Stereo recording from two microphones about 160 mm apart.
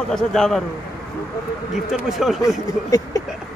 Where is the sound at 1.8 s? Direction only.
Centre (ahead or behind).